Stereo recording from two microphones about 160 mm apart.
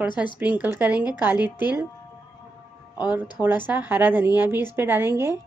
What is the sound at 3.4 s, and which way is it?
Speech, 10° right (ahead or behind).